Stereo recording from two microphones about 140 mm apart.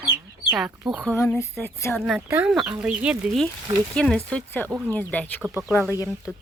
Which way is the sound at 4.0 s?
5° left (ahead or behind).